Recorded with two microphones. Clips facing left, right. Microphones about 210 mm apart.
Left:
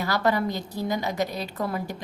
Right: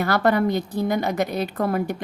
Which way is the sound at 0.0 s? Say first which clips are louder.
Right 5 dB; 55° right (ahead or behind).